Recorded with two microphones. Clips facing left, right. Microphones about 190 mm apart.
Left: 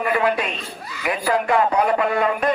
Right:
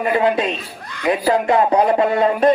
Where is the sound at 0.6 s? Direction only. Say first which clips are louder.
Even; 5° left (ahead or behind).